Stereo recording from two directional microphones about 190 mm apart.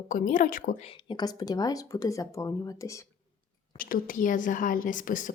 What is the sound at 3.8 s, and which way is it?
Speech, 50° left (ahead or behind).